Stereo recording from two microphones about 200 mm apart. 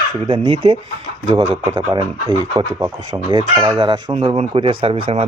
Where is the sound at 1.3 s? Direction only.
35° right (ahead or behind).